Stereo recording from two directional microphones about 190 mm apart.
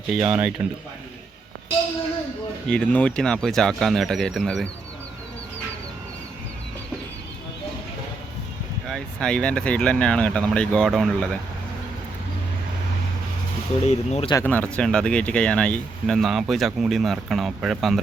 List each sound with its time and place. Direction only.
0.1 s speech: 5° right (ahead or behind)
2.6 s speech: 5° left (ahead or behind)
8.9 s speech: 5° left (ahead or behind)
13.8 s speech: 35° left (ahead or behind)
14.4 s speech: 10° left (ahead or behind)